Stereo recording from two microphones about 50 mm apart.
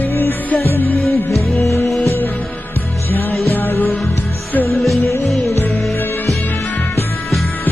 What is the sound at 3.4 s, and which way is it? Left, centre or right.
Music, left.